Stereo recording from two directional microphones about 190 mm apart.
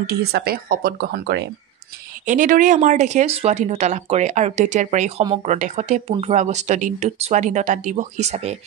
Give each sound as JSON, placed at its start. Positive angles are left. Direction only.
{"t": 0.0, "sound": "speech", "side_deg": -55}
{"t": 2.2, "sound": "speech", "side_deg": -45}